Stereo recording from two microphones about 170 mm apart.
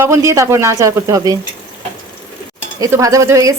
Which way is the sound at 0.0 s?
15° right (ahead or behind).